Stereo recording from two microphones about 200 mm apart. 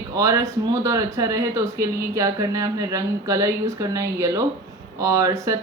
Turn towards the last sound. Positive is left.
turn(degrees=-15)  # may be behind; listen again after turning